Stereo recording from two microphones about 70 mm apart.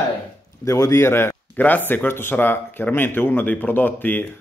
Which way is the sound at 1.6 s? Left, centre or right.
Left.